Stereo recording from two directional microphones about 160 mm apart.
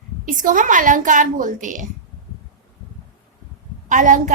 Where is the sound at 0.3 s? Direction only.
55° right (ahead or behind).